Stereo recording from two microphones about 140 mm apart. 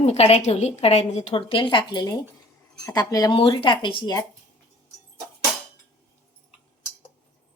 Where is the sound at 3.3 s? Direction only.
40° left (ahead or behind).